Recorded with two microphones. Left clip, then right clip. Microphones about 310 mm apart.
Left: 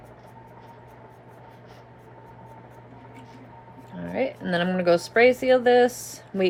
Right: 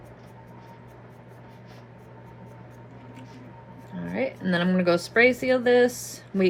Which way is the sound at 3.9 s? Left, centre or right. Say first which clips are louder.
Left 2 dB; centre.